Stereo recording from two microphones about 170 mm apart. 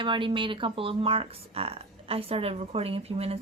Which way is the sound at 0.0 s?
30° right (ahead or behind).